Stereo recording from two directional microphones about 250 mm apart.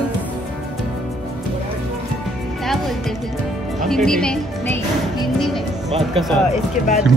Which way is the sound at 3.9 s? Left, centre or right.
Centre.